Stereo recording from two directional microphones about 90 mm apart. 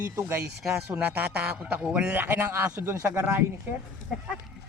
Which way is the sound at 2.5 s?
30° right (ahead or behind).